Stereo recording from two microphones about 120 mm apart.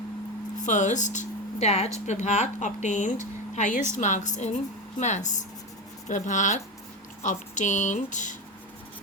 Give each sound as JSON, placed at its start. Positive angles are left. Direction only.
{"t": 0.5, "sound": "a woman's voice", "side_deg": 90}